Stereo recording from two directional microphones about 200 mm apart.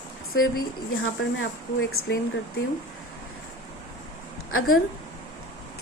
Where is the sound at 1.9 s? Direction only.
90° left.